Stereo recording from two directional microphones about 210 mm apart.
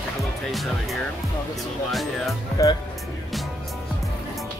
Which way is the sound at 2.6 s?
15° left (ahead or behind).